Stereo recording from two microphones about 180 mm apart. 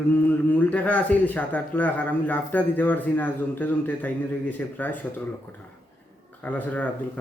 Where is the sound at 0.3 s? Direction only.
10° left (ahead or behind).